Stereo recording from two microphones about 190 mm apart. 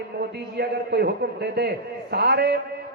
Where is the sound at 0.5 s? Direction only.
55° right (ahead or behind).